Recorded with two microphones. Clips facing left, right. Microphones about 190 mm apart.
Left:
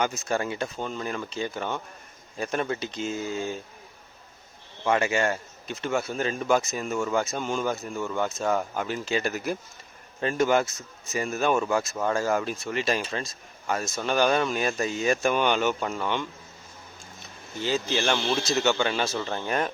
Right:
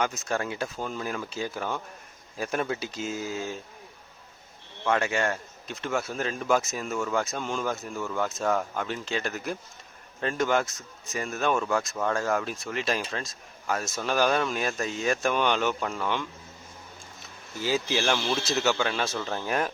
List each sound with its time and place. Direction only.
0.0 s speech: centre (ahead or behind)
4.8 s speech: 5° left (ahead or behind)
17.6 s speech: 10° right (ahead or behind)